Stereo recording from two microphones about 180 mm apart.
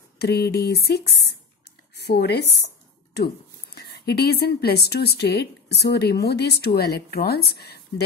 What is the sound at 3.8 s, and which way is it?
A woman's voice, 60° left (ahead or behind).